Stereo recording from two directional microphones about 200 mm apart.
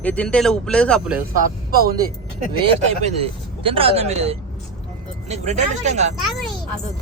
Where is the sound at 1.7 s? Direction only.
50° right (ahead or behind).